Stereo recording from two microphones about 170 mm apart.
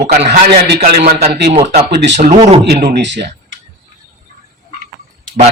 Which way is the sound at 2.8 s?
85° right.